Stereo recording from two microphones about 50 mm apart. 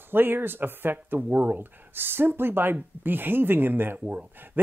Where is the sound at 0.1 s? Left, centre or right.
Right.